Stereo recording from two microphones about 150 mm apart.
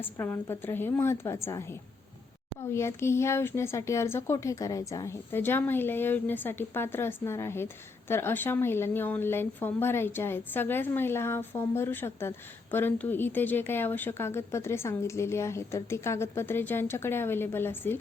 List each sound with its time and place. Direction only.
0.0 s speech: 15° left (ahead or behind)